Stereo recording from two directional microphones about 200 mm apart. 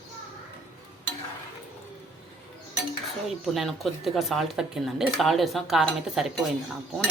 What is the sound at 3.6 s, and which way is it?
Speech, centre (ahead or behind).